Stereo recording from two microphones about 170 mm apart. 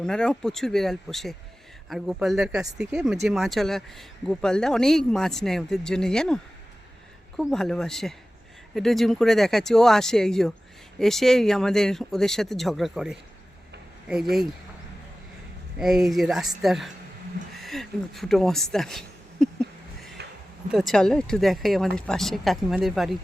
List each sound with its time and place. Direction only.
0.0 s speech: 5° left (ahead or behind)
15.8 s speech: centre (ahead or behind)
20.2 s a sound: 75° right (ahead or behind)
20.7 s speech: centre (ahead or behind)